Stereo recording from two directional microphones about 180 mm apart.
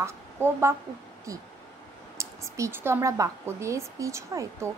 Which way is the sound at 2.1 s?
15° right (ahead or behind).